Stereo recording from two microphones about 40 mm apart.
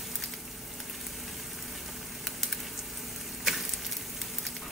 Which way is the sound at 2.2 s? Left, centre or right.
Centre.